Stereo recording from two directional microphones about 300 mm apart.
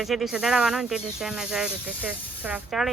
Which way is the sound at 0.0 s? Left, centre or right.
Centre.